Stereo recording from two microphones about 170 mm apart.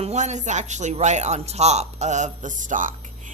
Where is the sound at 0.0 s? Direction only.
40° right (ahead or behind).